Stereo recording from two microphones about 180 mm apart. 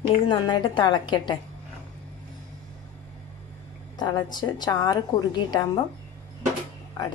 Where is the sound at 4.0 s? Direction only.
25° left (ahead or behind).